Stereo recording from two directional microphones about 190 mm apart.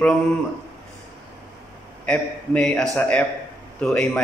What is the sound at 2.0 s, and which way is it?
A man's voice, 5° left (ahead or behind).